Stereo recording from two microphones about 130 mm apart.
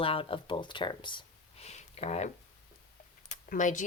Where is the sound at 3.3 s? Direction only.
75° left (ahead or behind).